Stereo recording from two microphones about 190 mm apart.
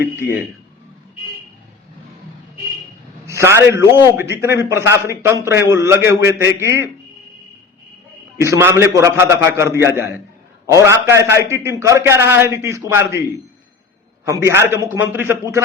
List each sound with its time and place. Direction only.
0.2 s a man's voice: 10° right (ahead or behind)
3.2 s a man's voice: 15° right (ahead or behind)
8.4 s a man's voice: 15° right (ahead or behind)
14.3 s a man's voice: 15° right (ahead or behind)